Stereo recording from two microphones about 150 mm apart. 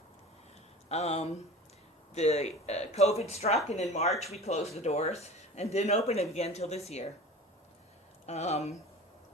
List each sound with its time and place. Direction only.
0.9 s speech: 45° left (ahead or behind)
8.3 s speech: 45° left (ahead or behind)